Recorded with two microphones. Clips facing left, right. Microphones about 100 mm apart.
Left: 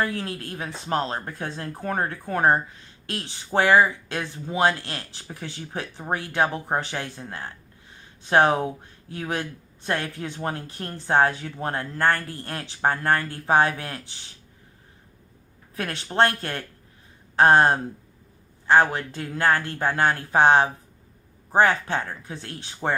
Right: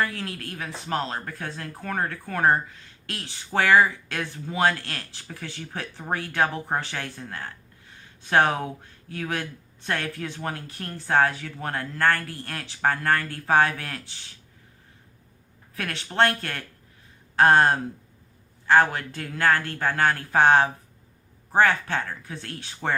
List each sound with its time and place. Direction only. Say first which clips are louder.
0.0 s speech: left 2 dB; 25° left (ahead or behind)
15.7 s speech: left 3 dB; 25° left (ahead or behind)